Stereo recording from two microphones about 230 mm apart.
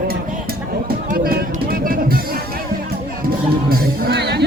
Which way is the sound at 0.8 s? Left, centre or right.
Right.